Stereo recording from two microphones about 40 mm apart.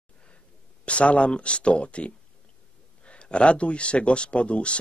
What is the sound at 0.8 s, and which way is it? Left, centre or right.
Speech, left.